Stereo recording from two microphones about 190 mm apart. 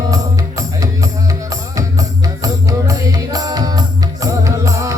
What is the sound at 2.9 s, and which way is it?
Music, 20° right (ahead or behind).